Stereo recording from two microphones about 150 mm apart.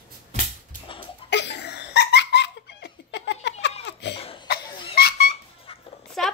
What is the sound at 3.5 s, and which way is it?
Laughter, 45° left (ahead or behind).